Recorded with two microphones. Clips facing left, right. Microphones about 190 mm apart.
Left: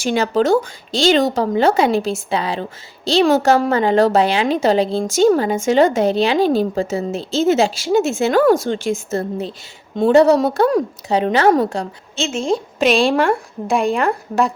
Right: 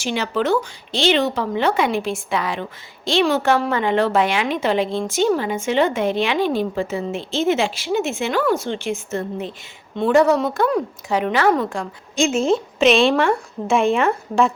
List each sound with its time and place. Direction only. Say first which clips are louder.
0.0 s a woman's voice: left 5 dB; 45° left (ahead or behind)
12.1 s a woman's voice: right 2 dB; 10° right (ahead or behind)